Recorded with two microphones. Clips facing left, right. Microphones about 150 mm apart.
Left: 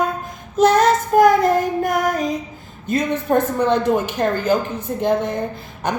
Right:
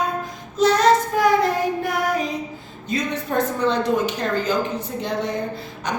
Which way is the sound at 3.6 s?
55° left (ahead or behind).